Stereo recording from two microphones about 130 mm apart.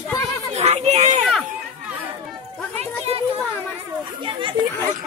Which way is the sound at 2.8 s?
50° right (ahead or behind).